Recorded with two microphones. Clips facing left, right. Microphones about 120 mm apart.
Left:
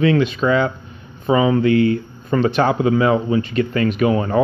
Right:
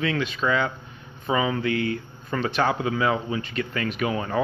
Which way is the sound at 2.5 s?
55° left (ahead or behind).